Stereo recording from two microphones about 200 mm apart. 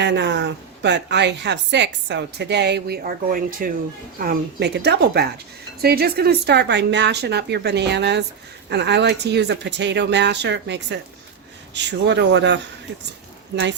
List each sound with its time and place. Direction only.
0.0 s a woman's voice: 60° right (ahead or behind)